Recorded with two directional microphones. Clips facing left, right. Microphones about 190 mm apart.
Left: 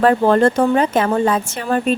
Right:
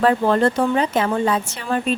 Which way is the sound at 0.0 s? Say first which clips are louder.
Left 3 dB; 50° left (ahead or behind).